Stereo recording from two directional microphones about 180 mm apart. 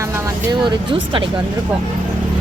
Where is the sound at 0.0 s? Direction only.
15° right (ahead or behind).